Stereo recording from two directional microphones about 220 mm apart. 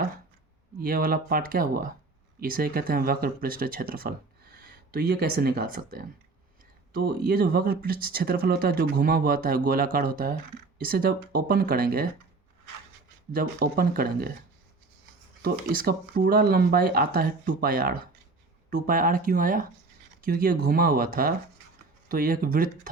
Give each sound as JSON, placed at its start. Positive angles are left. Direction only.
{"t": 0.8, "sound": "speech", "side_deg": -40}
{"t": 7.2, "sound": "speech", "side_deg": -45}
{"t": 13.3, "sound": "speech", "side_deg": -45}
{"t": 15.4, "sound": "speech", "side_deg": -45}